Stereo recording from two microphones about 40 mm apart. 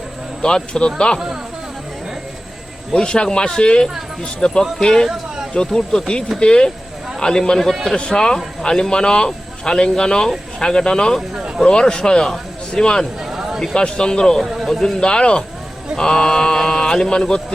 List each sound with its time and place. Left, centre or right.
0.4 s speech: left
2.9 s speech: left
5.0 s a sound: centre
5.5 s a man's voice: centre
14.4 s a man's voice: centre
14.7 s speech: centre
16.0 s mantra: centre
17.1 s speech: left